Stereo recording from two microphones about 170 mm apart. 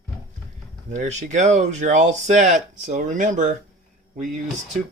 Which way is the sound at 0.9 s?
45° right (ahead or behind).